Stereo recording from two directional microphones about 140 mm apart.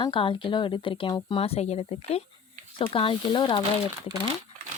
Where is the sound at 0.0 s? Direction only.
35° left (ahead or behind).